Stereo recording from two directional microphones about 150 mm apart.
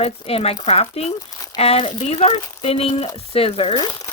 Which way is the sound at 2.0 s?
45° left (ahead or behind).